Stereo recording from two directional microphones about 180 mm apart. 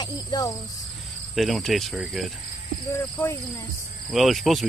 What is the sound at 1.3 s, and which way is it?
Speech, centre (ahead or behind).